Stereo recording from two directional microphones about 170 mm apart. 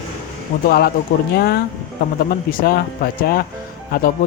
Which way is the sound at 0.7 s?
65° left (ahead or behind).